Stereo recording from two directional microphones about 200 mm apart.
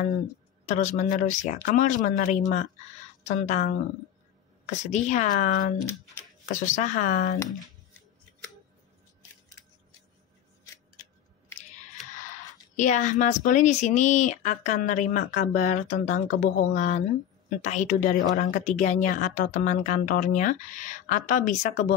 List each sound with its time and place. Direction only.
0.7 s a woman's voice: 35° left (ahead or behind)
12.7 s a woman's voice: 40° left (ahead or behind)